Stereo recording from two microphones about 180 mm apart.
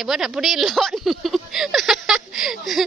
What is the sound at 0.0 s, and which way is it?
Speech, centre (ahead or behind).